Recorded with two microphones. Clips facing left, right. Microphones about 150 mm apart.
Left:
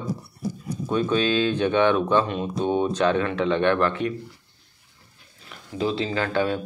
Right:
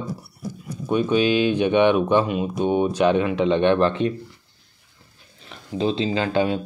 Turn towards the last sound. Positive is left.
turn(degrees=-15)  # may be behind; listen again after turning